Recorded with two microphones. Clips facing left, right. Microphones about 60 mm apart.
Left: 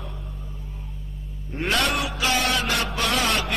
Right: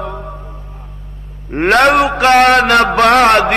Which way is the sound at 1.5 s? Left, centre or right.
Right.